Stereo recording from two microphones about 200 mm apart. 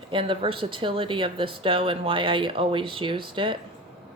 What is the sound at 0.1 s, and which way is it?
Speech, 25° right (ahead or behind).